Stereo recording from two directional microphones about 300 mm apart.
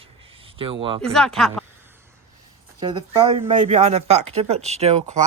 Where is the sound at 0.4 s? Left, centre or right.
Centre.